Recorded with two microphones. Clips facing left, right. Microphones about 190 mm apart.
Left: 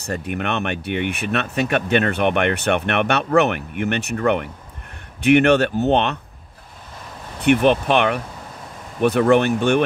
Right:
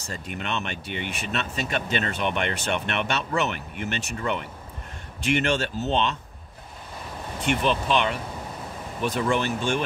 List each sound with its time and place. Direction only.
0.0 s speech: 60° left (ahead or behind)
7.4 s speech: 60° left (ahead or behind)